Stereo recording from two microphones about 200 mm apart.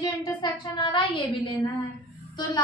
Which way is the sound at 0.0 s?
20° left (ahead or behind).